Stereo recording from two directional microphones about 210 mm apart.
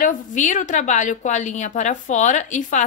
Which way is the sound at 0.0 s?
35° left (ahead or behind).